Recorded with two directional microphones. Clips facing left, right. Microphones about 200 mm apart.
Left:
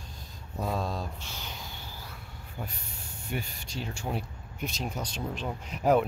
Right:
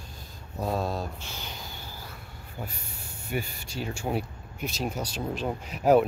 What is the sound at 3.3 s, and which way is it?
Speech, 5° right (ahead or behind).